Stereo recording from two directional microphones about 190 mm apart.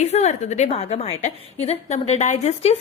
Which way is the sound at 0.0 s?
35° left (ahead or behind).